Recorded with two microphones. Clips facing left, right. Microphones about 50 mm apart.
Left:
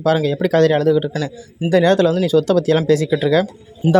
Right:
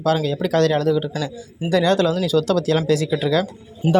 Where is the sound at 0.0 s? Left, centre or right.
Left.